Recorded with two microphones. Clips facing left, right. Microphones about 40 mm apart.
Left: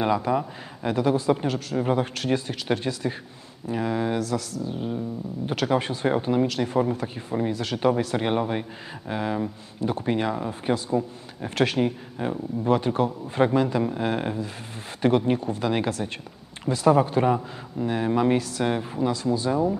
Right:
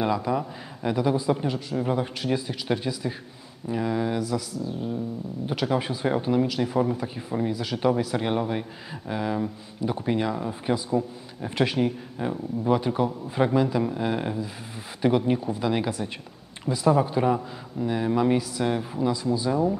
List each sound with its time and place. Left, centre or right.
0.0 s a man's voice: centre
1.8 s a man's voice: centre
4.6 s a sound: left
5.7 s a man's voice: centre